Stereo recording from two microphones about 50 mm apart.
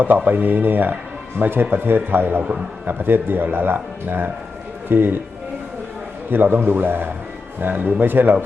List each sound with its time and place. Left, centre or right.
0.3 s speech: right
6.3 s speech: right